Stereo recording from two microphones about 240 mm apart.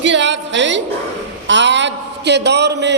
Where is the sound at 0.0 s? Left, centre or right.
Right.